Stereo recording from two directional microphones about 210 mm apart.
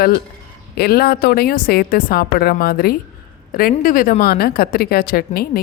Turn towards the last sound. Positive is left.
turn(degrees=45)  # may be behind; listen again after turning